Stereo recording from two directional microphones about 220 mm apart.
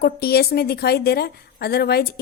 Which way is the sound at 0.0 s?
45° left (ahead or behind).